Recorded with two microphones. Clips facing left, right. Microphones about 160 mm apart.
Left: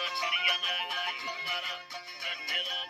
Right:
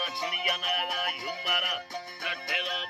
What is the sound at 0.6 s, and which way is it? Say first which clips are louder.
Music: right 6 dB; 60° right (ahead or behind).